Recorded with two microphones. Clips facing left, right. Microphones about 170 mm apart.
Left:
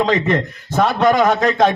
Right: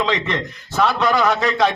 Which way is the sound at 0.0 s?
45° left (ahead or behind).